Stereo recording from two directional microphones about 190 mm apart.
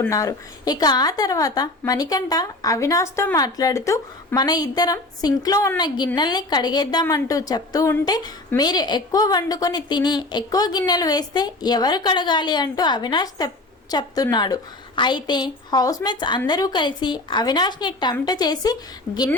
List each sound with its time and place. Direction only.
0.0 s a woman's voice: 15° left (ahead or behind)